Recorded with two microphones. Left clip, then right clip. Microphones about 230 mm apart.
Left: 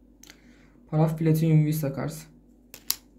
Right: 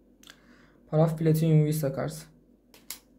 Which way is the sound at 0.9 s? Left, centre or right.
Centre.